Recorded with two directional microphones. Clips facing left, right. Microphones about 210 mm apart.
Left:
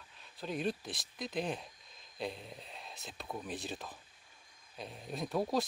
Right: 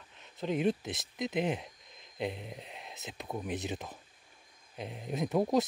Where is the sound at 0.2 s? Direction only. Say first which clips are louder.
Right 6 dB; 20° right (ahead or behind).